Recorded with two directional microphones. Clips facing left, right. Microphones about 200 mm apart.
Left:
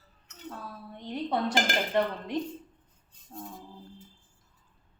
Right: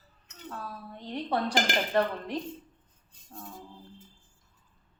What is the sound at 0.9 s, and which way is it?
Speech, 20° left (ahead or behind).